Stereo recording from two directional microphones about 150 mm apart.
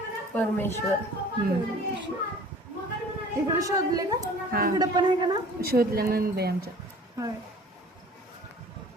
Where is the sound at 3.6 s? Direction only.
25° right (ahead or behind).